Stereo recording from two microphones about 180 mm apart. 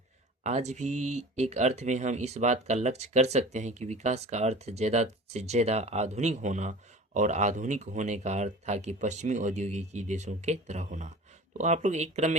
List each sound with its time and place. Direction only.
0.4 s speech: 40° right (ahead or behind)